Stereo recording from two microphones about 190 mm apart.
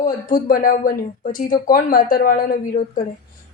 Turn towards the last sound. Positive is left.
turn(degrees=50)  # may be behind; listen again after turning